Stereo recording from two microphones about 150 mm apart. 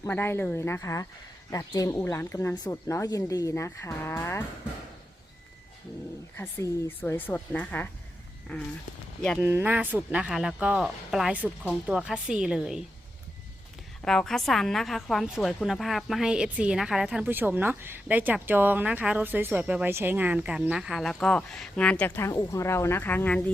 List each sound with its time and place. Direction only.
0.0 s speech: 15° left (ahead or behind)
6.3 s speech: 15° left (ahead or behind)
9.4 s a woman's voice: 15° right (ahead or behind)
14.0 s a woman's voice: 5° left (ahead or behind)